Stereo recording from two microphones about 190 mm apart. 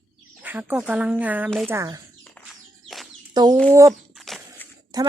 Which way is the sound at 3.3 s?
20° right (ahead or behind).